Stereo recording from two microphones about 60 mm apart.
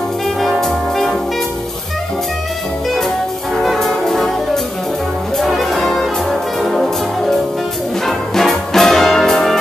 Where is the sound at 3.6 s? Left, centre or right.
Centre.